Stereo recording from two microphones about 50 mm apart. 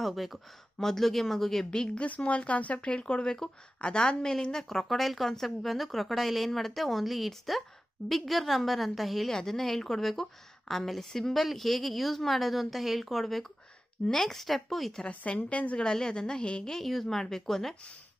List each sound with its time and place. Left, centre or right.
0.0 s a woman's voice: centre
2.0 s a woman's voice: left; by 15.0 s centre
15.0 s a woman's voice: left
15.8 s a woman's voice: centre